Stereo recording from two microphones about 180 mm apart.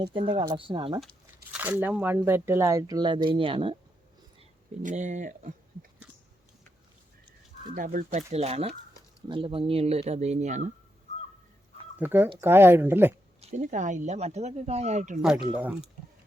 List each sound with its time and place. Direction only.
0.0 s speech: 30° right (ahead or behind)
1.5 s speech: 10° right (ahead or behind); by 3.8 s 30° right (ahead or behind)
4.8 s speech: 45° right (ahead or behind)
7.7 s speech: 45° right (ahead or behind)
11.9 s speech: 10° right (ahead or behind)
13.4 s speech: 40° right (ahead or behind)